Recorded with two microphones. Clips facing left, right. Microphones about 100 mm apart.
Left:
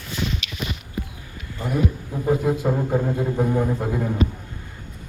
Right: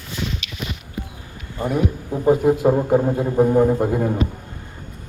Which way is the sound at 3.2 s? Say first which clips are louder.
Right 6 dB; 30° right (ahead or behind).